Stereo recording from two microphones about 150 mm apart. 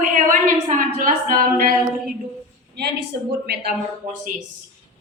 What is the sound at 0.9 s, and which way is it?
Singing, 65° right (ahead or behind).